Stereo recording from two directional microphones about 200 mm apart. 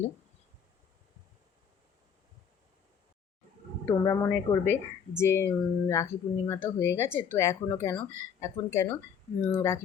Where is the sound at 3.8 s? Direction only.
15° left (ahead or behind).